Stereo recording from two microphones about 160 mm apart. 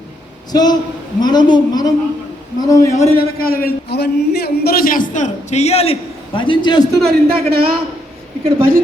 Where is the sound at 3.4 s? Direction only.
70° left (ahead or behind); by 6.8 s 30° left (ahead or behind).